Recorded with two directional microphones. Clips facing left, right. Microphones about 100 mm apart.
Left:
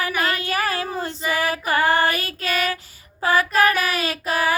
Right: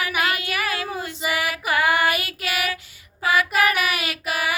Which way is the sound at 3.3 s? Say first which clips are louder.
Left 2 dB; 35° left (ahead or behind).